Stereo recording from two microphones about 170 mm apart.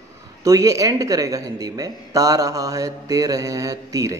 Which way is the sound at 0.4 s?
20° right (ahead or behind).